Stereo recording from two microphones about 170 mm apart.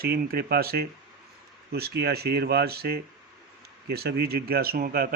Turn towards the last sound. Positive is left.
turn(degrees=-60)  # may be behind; listen again after turning